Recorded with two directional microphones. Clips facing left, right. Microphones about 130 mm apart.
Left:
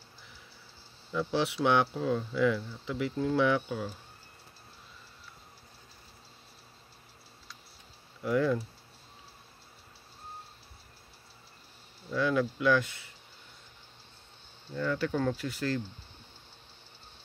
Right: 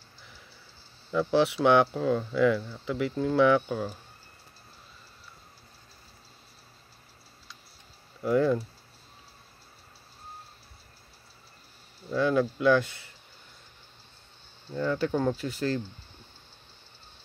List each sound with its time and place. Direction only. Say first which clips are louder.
1.1 s speech: right 6 dB; 55° right (ahead or behind)
8.2 s speech: right 4 dB; 30° right (ahead or behind)
12.1 s speech: right 3 dB; 35° right (ahead or behind)
14.7 s speech: right 3 dB; 30° right (ahead or behind)